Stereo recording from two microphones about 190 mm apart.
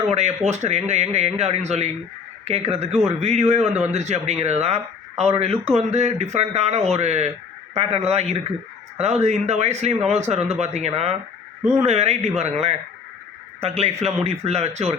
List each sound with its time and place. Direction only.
0.0 s a man's voice: 35° right (ahead or behind)